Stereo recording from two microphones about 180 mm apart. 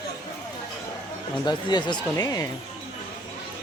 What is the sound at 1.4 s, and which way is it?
Speech, 25° left (ahead or behind).